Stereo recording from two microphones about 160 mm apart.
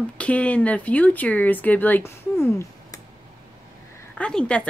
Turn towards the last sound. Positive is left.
turn(degrees=5)  # may be behind; listen again after turning